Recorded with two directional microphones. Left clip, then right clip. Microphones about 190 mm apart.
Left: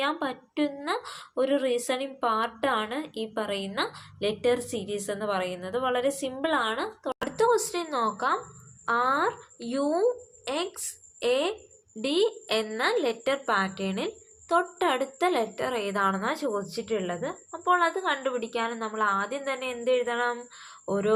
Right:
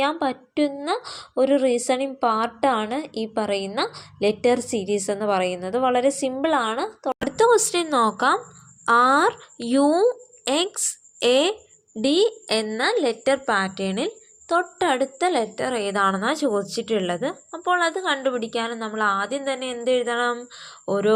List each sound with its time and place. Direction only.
0.0 s a woman's voice: 30° right (ahead or behind)